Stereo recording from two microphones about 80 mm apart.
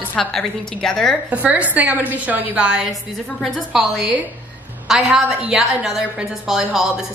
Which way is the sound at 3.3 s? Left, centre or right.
Centre.